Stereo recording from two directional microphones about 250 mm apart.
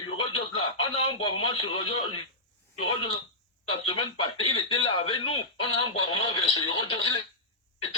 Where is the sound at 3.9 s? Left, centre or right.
Centre.